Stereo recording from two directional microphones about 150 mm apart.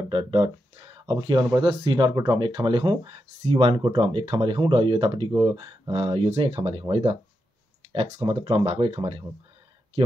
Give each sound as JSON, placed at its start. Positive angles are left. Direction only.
{"t": 0.1, "sound": "speech", "side_deg": -35}